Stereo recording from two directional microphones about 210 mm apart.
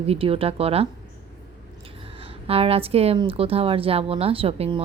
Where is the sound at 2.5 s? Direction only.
25° right (ahead or behind).